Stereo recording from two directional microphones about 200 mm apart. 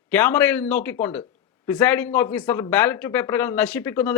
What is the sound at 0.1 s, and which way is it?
Speech, 10° left (ahead or behind).